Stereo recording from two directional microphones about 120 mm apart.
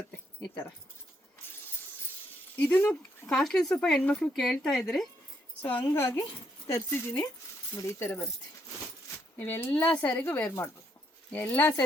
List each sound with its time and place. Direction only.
0.4 s speech: 10° left (ahead or behind)
2.6 s speech: 15° left (ahead or behind)
5.9 s speech: 35° left (ahead or behind)
6.7 s speech: 20° left (ahead or behind)
9.4 s speech: 15° left (ahead or behind)